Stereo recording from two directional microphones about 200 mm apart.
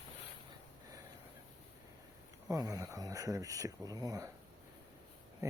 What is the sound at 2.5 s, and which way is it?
Speech, 15° right (ahead or behind).